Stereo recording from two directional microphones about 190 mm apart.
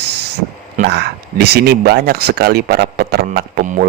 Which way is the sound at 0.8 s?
60° right (ahead or behind).